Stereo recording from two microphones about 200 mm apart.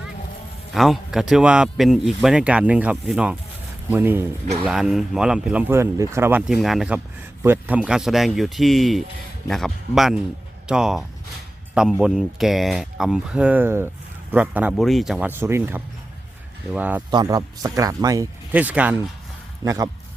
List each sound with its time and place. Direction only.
0.7 s a man's voice: centre (ahead or behind)
17.1 s speech: 20° right (ahead or behind)